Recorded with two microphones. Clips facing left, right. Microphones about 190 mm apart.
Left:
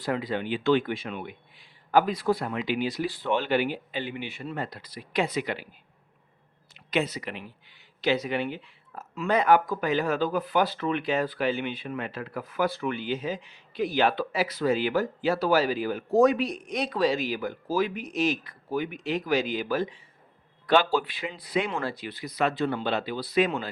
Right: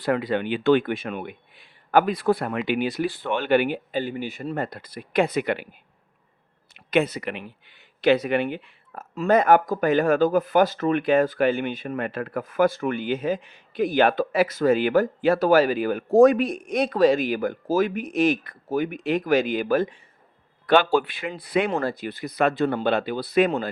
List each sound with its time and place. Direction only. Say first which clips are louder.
0.0 s speech: right 5 dB; 60° right (ahead or behind)
6.7 s speech: right 6 dB; 60° right (ahead or behind)
9.1 s speech: right 4 dB; 45° right (ahead or behind)
21.7 s speech: right 6 dB; 45° right (ahead or behind)